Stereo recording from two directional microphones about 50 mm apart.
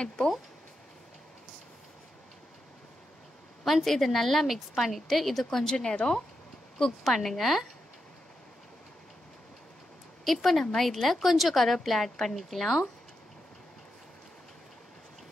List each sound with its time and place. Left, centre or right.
0.0 s speech: centre
3.6 s speech: centre
6.8 s speech: centre
10.2 s speech: centre